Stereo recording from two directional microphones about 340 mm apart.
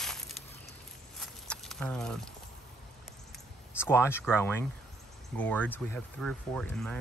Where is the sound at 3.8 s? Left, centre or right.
Centre.